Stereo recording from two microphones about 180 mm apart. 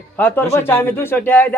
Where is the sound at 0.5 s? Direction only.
10° left (ahead or behind).